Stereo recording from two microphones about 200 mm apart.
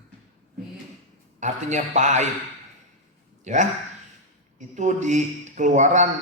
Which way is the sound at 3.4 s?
35° right (ahead or behind).